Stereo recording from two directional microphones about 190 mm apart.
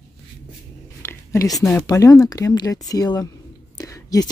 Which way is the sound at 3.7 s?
20° left (ahead or behind).